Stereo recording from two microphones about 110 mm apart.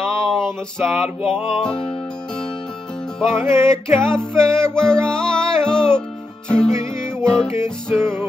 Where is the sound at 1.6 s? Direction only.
5° left (ahead or behind).